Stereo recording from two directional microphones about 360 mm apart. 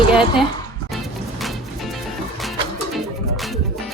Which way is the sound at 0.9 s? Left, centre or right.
Centre.